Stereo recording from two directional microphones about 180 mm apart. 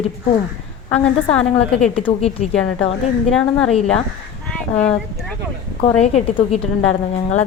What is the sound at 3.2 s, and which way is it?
A woman's voice, 5° left (ahead or behind).